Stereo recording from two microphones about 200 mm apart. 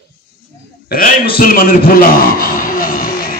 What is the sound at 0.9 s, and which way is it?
A man's voice, 50° left (ahead or behind).